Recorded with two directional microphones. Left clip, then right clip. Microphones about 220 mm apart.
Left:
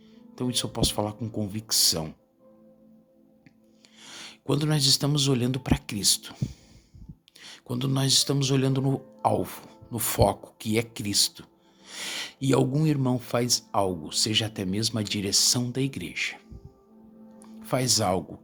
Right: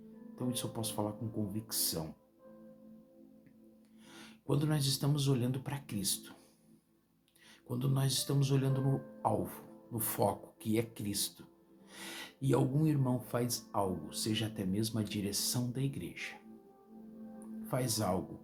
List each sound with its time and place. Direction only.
0.3 s speech: 45° left (ahead or behind)
4.0 s speech: 45° left (ahead or behind)
7.3 s speech: 45° left (ahead or behind)
17.7 s speech: 45° left (ahead or behind)